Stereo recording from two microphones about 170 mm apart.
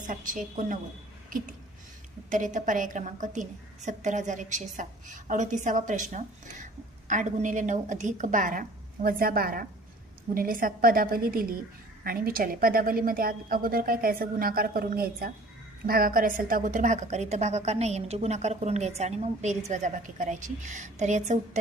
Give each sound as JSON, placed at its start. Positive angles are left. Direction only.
{"t": 0.1, "sound": "a woman's voice", "side_deg": -50}
{"t": 1.3, "sound": "a sound", "side_deg": -55}
{"t": 2.3, "sound": "a woman's voice", "side_deg": -50}